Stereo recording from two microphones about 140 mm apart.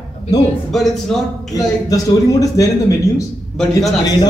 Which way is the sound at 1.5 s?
25° left (ahead or behind).